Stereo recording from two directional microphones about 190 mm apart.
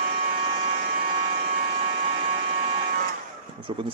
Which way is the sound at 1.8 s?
30° right (ahead or behind).